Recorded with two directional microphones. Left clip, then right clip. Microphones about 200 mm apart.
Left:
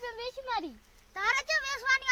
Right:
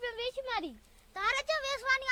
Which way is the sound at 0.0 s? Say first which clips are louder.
Right 2 dB; 5° right (ahead or behind).